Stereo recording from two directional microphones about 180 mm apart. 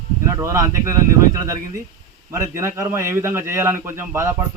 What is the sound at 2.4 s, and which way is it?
Speech, 15° right (ahead or behind).